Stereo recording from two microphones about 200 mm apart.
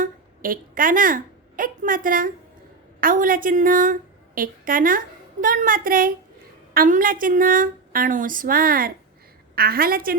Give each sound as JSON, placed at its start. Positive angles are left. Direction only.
{"t": 0.0, "sound": "a woman's voice", "side_deg": -45}